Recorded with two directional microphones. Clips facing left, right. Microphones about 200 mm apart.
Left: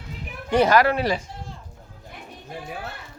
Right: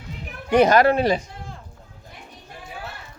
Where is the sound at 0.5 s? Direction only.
20° right (ahead or behind).